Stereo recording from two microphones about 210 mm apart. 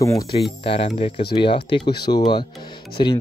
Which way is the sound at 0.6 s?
25° left (ahead or behind).